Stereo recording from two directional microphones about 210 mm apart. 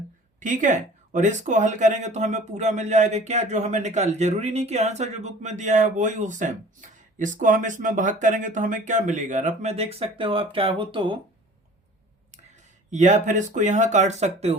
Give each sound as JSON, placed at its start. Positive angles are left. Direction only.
{"t": 0.3, "sound": "speech", "side_deg": -35}
{"t": 12.9, "sound": "speech", "side_deg": -35}